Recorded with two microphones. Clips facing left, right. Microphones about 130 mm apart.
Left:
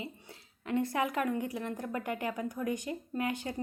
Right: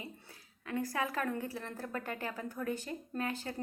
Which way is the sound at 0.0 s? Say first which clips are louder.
Left 5 dB; 20° left (ahead or behind).